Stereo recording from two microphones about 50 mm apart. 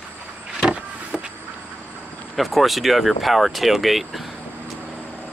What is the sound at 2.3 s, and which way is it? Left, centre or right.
Speech, centre.